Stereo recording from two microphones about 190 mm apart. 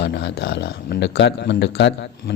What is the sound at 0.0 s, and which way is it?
A man's voice, 65° left (ahead or behind).